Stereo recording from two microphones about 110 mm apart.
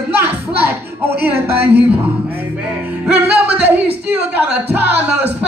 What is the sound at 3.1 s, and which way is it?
Speech, 15° right (ahead or behind).